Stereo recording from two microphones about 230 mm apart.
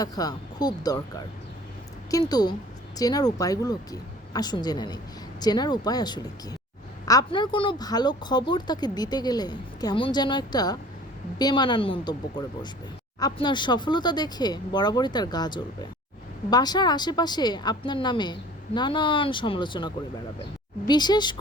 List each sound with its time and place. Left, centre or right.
0.0 s speech: centre
2.3 s a woman's voice: centre